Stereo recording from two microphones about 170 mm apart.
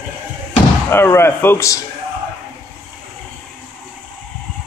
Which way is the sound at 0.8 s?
15° left (ahead or behind).